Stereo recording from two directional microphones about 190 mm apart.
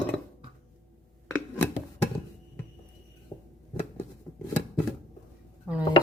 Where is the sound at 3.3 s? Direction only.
30° left (ahead or behind).